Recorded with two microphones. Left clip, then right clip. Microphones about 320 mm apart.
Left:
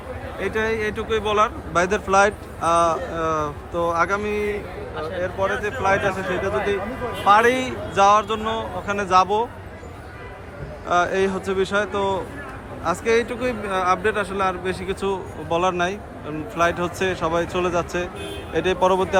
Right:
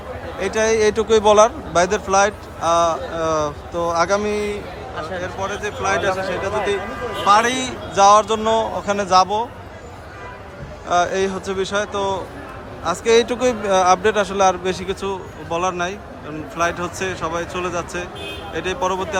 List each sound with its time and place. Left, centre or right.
0.3 s speech: centre
10.8 s speech: centre